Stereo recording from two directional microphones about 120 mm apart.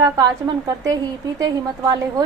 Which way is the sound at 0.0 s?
30° right (ahead or behind).